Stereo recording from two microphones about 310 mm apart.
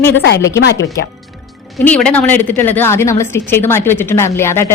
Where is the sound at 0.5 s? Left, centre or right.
Left.